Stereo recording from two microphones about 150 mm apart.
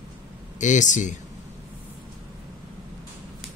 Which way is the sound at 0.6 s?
55° left (ahead or behind).